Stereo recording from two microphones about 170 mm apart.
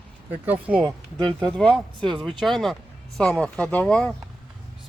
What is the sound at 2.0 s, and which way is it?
Speech, 30° right (ahead or behind).